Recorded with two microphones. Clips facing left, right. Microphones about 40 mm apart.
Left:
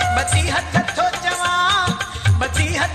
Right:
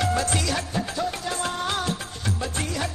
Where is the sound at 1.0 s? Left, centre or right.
Left.